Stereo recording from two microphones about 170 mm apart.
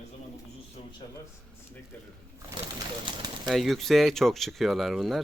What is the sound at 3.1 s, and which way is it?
Pigeon, 25° right (ahead or behind).